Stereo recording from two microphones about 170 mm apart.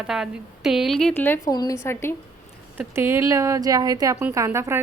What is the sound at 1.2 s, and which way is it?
Speech, 15° left (ahead or behind).